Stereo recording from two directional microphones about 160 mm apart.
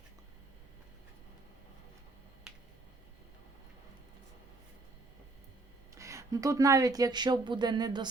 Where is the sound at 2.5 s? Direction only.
5° right (ahead or behind).